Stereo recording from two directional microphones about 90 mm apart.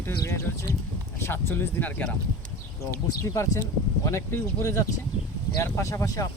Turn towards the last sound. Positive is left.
turn(degrees=40)  # may be behind; listen again after turning